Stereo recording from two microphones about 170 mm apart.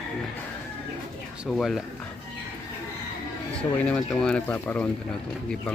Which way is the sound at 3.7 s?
5° left (ahead or behind).